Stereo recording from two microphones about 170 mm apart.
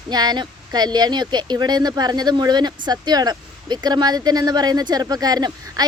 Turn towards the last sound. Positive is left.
turn(degrees=-20)  # may be behind; listen again after turning